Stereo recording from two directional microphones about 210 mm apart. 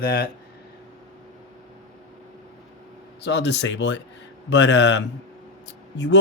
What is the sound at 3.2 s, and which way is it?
Speech, 55° left (ahead or behind).